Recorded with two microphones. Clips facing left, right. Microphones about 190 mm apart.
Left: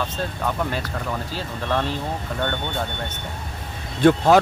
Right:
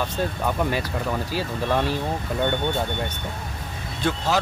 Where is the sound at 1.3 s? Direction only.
10° right (ahead or behind).